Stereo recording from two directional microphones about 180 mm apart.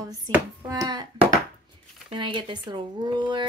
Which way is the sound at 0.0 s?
20° right (ahead or behind).